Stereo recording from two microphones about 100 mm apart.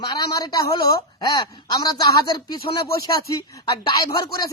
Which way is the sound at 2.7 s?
60° left (ahead or behind).